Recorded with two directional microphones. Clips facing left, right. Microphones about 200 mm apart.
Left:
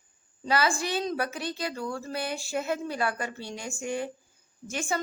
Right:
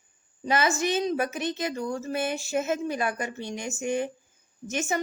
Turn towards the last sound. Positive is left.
turn(degrees=-20)  # may be behind; listen again after turning